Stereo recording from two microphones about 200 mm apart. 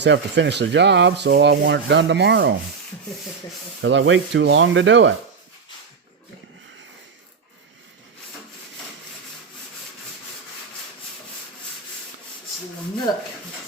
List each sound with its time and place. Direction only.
0.0 s rub: 60° right (ahead or behind)
3.8 s speech: 70° right (ahead or behind)
13.1 s speech: 20° left (ahead or behind)